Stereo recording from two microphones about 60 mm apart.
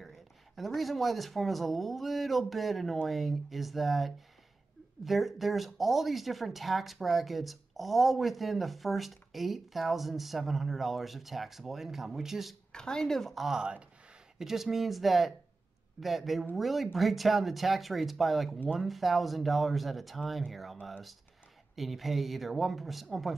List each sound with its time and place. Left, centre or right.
0.0 s a sound: centre
0.7 s speech: centre
12.7 s speech: centre
13.6 s speech: centre
14.4 s speech: centre